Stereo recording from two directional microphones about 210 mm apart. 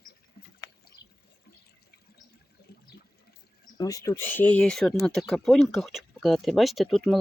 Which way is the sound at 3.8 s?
15° left (ahead or behind).